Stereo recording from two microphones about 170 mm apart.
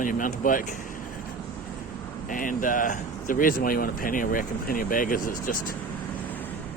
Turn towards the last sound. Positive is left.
turn(degrees=55)  # may be behind; listen again after turning